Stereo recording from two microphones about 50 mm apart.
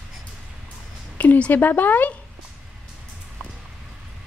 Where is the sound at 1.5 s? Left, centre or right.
Left.